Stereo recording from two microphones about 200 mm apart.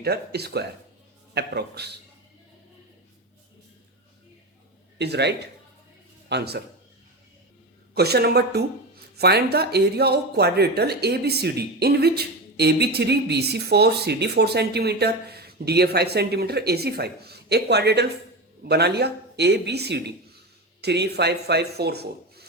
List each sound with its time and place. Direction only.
0.0 s speech: 55° right (ahead or behind)
4.9 s a man's voice: 55° right (ahead or behind)
7.9 s speech: 55° right (ahead or behind)